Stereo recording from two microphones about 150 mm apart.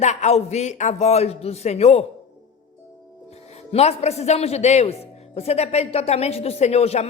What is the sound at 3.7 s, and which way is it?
A man's voice, 45° left (ahead or behind).